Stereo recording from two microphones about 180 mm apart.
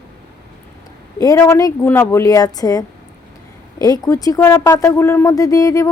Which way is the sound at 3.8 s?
20° left (ahead or behind).